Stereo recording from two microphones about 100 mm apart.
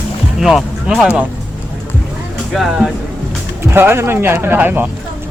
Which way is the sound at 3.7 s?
25° right (ahead or behind).